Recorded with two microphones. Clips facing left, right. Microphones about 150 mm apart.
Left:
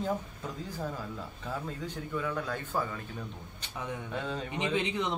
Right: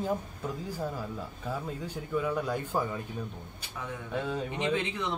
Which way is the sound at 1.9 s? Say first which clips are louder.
Right 5 dB; 10° right (ahead or behind).